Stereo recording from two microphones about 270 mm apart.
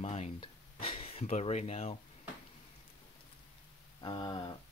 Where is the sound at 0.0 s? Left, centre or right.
Left.